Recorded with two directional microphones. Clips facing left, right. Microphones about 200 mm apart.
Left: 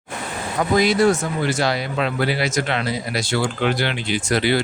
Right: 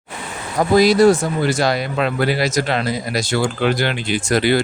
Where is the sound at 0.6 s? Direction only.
35° right (ahead or behind).